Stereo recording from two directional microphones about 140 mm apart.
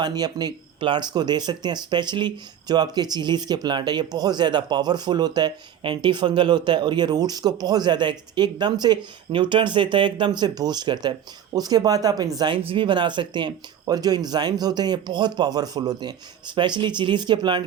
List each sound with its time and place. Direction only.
0.0 s speech: 30° right (ahead or behind)
12.5 s speech: 40° right (ahead or behind)